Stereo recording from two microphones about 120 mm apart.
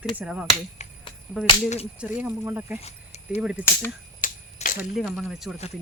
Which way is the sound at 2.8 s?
60° left (ahead or behind).